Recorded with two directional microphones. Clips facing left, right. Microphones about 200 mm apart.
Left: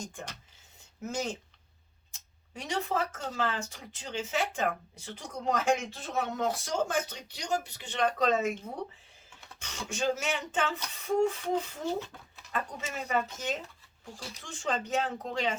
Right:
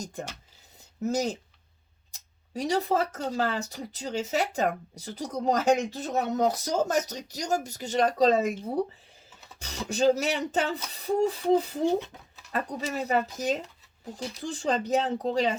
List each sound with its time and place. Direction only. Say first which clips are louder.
0.0 s speech: right 5 dB; 40° right (ahead or behind)